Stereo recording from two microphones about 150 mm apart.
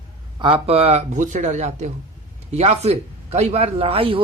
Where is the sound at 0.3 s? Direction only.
35° right (ahead or behind).